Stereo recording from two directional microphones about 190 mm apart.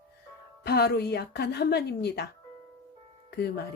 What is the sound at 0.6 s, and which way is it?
A woman's voice, 60° left (ahead or behind).